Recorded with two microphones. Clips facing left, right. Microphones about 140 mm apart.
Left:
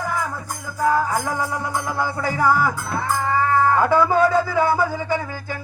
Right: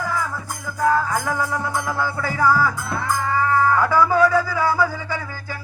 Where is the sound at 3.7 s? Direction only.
25° left (ahead or behind).